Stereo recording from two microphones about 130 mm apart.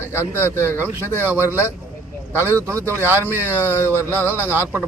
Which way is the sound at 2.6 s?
20° right (ahead or behind).